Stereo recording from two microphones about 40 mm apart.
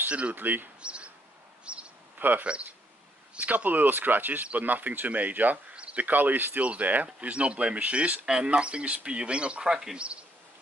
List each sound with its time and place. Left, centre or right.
0.3 s speech: right
0.7 s a sound: right
2.1 s a sound: right
2.4 s speech: right
3.3 s speech: right
5.7 s a sound: right
6.0 s speech: right
6.6 s speech: right
9.7 s speech: centre